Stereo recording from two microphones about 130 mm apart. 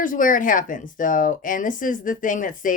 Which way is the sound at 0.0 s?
90° left.